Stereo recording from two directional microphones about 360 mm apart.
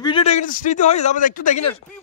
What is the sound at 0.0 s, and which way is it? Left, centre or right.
A man's voice, centre.